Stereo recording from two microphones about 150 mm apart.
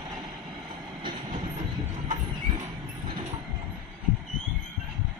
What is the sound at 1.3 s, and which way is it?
Train, 55° right (ahead or behind).